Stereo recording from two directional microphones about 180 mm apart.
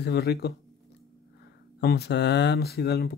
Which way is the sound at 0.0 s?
65° left (ahead or behind).